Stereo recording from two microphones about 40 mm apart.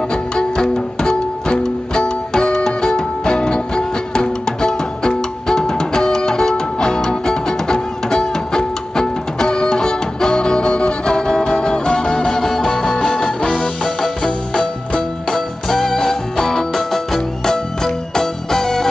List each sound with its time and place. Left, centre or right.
0.1 s music: centre